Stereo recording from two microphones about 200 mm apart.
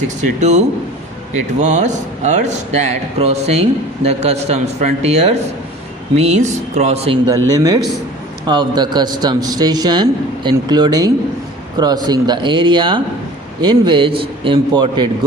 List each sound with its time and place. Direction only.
0.3 s speech: 35° right (ahead or behind)
7.3 s a man's voice: 20° right (ahead or behind)